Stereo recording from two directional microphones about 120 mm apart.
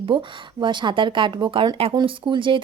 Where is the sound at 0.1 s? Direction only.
45° right (ahead or behind).